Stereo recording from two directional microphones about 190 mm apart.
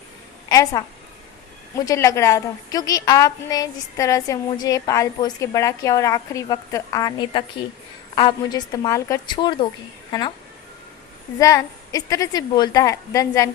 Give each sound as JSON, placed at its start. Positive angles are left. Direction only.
{"t": 0.4, "sound": "a woman's voice", "side_deg": 20}
{"t": 11.3, "sound": "a woman's voice", "side_deg": 15}